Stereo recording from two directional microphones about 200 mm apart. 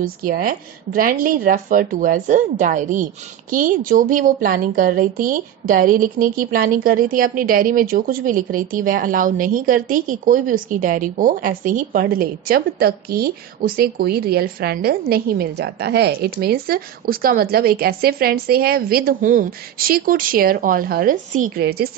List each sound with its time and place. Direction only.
0.0 s a woman's voice: 45° right (ahead or behind)